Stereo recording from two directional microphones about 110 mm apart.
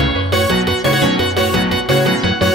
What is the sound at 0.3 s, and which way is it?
Music, centre (ahead or behind).